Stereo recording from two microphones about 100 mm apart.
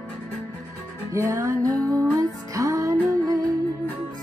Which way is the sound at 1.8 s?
10° left (ahead or behind).